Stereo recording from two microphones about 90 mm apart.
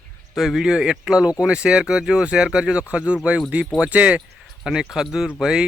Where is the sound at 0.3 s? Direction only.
Centre (ahead or behind).